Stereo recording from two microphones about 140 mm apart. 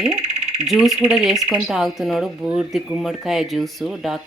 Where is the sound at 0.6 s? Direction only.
Centre (ahead or behind).